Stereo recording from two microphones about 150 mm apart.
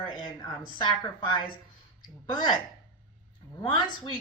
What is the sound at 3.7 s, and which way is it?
Speech, 30° left (ahead or behind).